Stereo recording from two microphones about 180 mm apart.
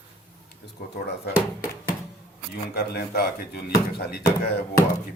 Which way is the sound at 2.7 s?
60° left (ahead or behind).